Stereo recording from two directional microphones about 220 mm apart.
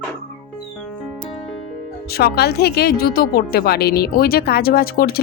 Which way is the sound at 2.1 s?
45° left (ahead or behind).